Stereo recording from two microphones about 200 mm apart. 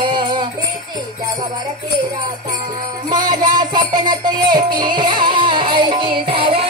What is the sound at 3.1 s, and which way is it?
Music, 20° right (ahead or behind).